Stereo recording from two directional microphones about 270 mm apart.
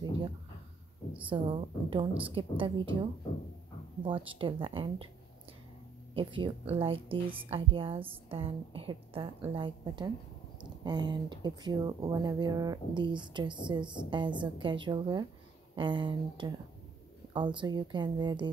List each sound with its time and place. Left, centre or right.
1.2 s a woman's voice: centre
4.0 s a woman's voice: centre
6.1 s a woman's voice: centre